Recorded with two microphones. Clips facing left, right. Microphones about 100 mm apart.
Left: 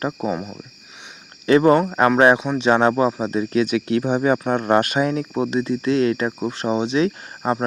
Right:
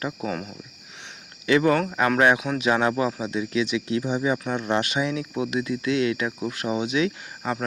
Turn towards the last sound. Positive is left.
turn(degrees=35)  # may be behind; listen again after turning